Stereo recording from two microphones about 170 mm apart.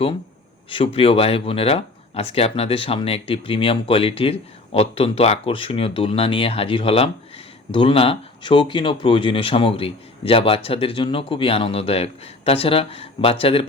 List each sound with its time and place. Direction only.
0.7 s speech: 30° left (ahead or behind)